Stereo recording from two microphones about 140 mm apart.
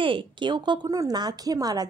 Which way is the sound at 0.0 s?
35° right (ahead or behind).